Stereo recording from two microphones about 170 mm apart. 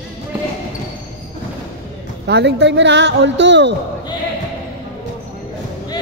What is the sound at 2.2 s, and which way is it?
Speech, 85° right.